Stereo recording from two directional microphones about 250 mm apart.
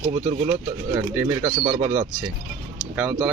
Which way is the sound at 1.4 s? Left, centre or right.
Right.